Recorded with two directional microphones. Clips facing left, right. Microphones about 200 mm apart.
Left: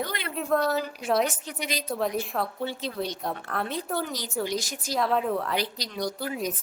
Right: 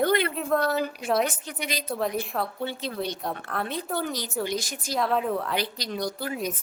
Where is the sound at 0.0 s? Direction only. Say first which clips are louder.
Right 10 dB; 55° right (ahead or behind).